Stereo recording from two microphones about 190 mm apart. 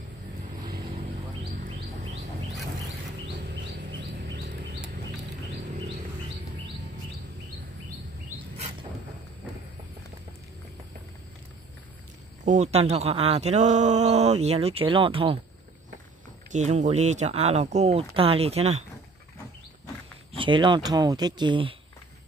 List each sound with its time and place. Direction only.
12.4 s speech: 35° right (ahead or behind)
16.5 s speech: 40° right (ahead or behind)
20.3 s speech: 25° right (ahead or behind)